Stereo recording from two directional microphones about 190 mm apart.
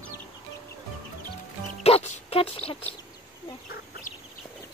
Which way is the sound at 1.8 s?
35° left (ahead or behind).